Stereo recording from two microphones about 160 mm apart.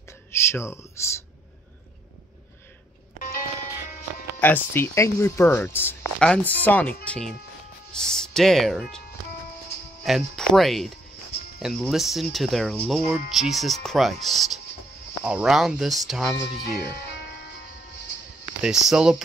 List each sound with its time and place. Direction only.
0.3 s speech: 15° left (ahead or behind)
3.2 s music: 60° left (ahead or behind)
4.4 s speech: 10° left (ahead or behind)
10.0 s speech: centre (ahead or behind)
18.6 s speech: 5° right (ahead or behind)